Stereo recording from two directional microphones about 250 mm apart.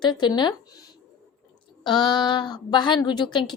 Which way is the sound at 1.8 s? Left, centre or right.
Centre.